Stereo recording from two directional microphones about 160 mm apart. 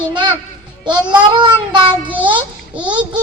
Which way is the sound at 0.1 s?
30° right (ahead or behind).